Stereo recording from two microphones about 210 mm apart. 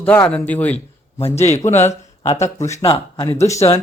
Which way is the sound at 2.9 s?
20° left (ahead or behind).